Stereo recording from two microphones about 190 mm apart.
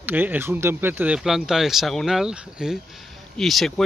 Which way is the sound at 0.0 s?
10° right (ahead or behind).